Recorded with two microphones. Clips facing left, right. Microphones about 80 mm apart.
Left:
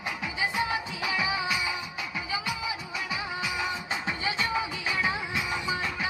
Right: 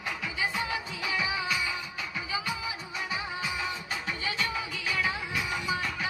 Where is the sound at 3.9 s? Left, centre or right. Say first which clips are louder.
Left 3 dB; left.